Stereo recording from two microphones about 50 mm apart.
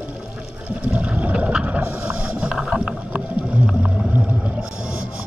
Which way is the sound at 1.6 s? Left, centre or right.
Right.